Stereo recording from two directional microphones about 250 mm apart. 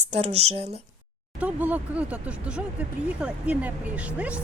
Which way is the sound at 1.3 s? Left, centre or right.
Centre.